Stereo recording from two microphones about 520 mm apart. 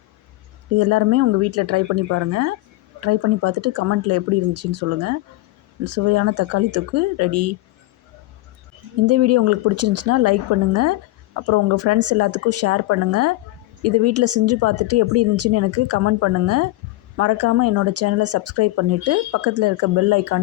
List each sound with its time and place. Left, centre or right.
0.8 s speech: right
9.0 s speech: right